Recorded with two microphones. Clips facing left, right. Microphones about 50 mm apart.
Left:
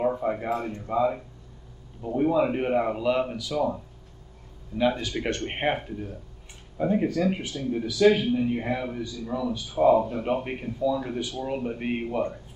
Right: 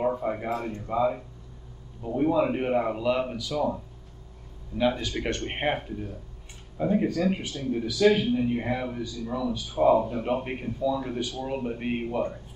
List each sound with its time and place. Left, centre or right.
0.0 s a sound: centre
0.5 s a man's voice: left
0.8 s a man's voice: centre
6.8 s a man's voice: centre